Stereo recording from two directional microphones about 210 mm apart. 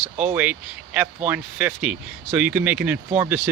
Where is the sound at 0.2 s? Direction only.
10° right (ahead or behind).